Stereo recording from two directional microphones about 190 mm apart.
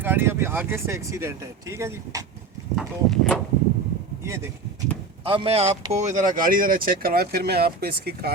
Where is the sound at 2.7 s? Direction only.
5° left (ahead or behind).